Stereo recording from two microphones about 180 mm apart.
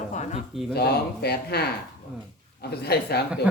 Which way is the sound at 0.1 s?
40° left (ahead or behind).